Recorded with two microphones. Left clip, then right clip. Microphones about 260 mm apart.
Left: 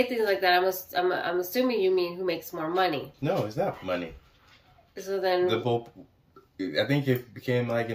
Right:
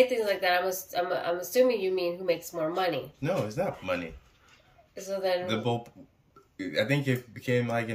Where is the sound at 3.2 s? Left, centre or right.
Centre.